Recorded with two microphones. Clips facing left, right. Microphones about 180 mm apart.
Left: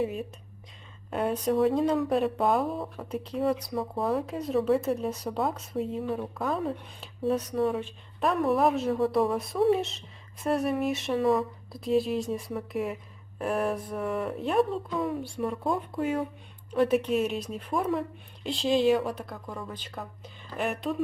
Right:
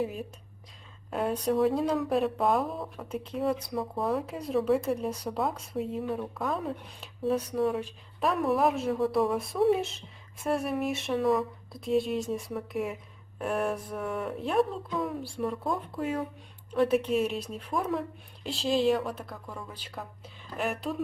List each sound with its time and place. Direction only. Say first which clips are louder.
0.0 s speech: left 2 dB; centre (ahead or behind)